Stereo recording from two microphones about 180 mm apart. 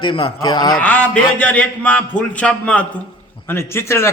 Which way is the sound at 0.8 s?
10° left (ahead or behind).